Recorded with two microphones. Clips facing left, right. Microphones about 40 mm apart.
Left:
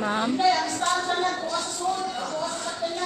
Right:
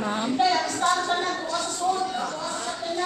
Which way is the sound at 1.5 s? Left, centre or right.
Centre.